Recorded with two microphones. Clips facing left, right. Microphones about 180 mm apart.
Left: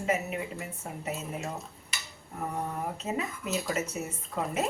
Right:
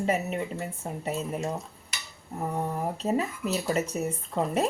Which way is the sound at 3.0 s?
35° right (ahead or behind).